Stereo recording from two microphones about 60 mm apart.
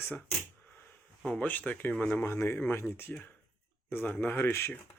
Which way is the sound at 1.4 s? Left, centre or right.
Left.